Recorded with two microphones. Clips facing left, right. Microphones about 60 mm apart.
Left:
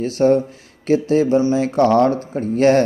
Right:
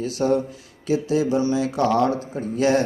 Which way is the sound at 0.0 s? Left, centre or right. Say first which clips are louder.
Left 6 dB; left.